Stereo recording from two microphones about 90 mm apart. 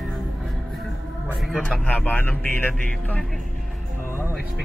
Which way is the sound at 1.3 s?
5° right (ahead or behind).